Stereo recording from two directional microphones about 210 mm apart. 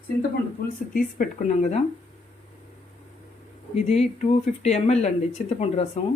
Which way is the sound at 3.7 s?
30° left (ahead or behind).